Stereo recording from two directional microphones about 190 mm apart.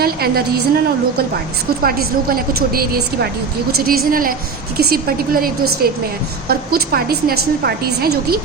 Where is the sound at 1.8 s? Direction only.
50° right (ahead or behind).